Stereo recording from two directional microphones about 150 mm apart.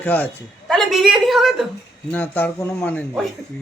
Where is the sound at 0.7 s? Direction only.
Centre (ahead or behind).